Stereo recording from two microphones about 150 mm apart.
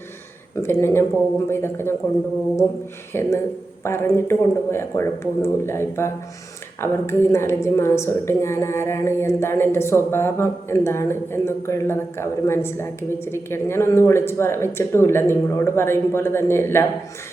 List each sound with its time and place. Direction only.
0.5 s a woman's voice: 15° left (ahead or behind)
3.1 s a woman's voice: 15° left (ahead or behind)